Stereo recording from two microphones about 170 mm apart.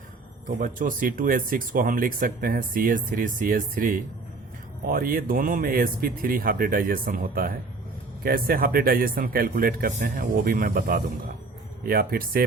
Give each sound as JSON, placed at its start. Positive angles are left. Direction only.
{"t": 0.4, "sound": "speech", "side_deg": -55}